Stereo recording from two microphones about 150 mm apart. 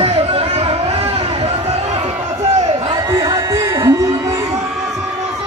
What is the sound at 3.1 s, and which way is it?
Music, 25° right (ahead or behind).